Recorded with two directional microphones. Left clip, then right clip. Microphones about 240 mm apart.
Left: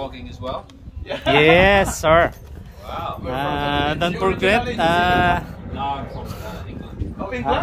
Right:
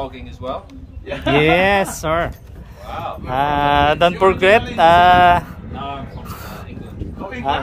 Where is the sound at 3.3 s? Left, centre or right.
Centre.